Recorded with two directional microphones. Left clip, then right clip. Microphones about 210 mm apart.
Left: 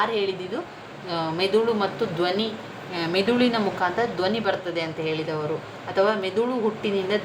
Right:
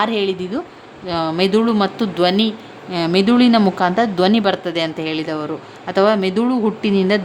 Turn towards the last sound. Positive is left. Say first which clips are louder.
# right 7 dB
turn(degrees=-55)  # may be behind; listen again after turning